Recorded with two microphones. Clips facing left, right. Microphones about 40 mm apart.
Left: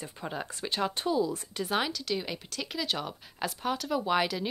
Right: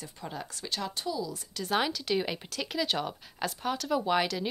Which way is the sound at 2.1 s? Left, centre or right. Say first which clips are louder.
Right 4 dB; centre.